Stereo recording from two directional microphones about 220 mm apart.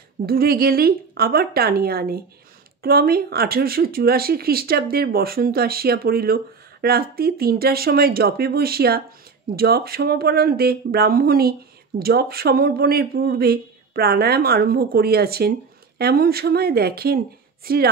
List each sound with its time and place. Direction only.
0.3 s speech: 45° right (ahead or behind)